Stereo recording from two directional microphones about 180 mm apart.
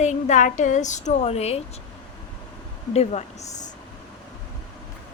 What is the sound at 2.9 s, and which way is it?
Speech, 35° left (ahead or behind).